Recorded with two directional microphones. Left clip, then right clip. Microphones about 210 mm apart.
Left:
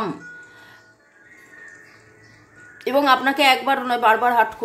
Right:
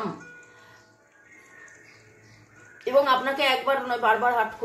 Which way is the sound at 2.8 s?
50° left (ahead or behind).